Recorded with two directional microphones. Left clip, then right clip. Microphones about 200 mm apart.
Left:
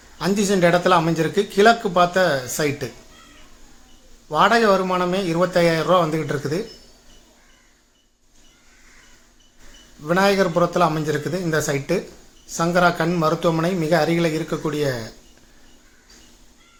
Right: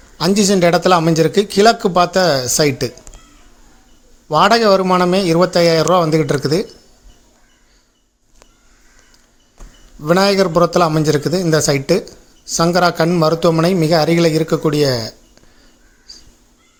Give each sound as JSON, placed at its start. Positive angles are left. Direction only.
{"t": 0.2, "sound": "speech", "side_deg": -50}
{"t": 4.3, "sound": "speech", "side_deg": -45}
{"t": 10.0, "sound": "speech", "side_deg": -45}